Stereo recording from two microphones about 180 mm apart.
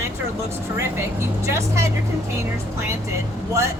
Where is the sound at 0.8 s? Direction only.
15° right (ahead or behind).